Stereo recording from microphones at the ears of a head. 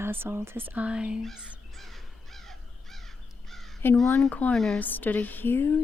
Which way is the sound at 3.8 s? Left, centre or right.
Left.